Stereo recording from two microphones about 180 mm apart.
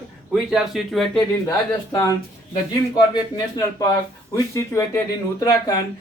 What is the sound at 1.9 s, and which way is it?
Speech, 20° left (ahead or behind).